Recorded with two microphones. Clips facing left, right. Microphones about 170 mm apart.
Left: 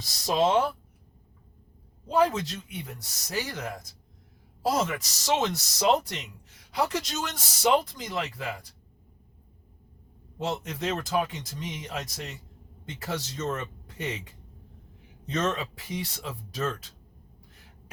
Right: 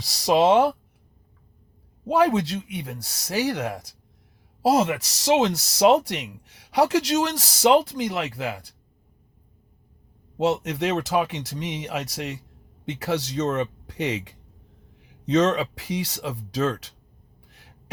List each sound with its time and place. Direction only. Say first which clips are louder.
0.0 s speech: right 6 dB; 75° right (ahead or behind)
2.0 s speech: right 4 dB; 70° right (ahead or behind)
10.3 s speech: right 9 dB; 80° right
15.2 s speech: right 9 dB; 80° right